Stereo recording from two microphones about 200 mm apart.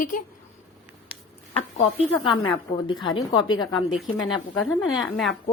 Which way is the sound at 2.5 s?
25° left (ahead or behind).